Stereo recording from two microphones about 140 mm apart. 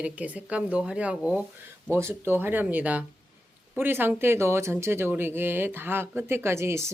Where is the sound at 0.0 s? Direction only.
10° right (ahead or behind).